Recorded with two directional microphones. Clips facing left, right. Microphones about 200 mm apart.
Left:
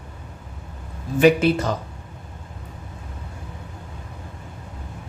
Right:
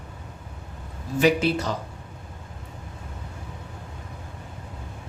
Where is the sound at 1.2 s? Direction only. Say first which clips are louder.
Left 5 dB; 55° left (ahead or behind).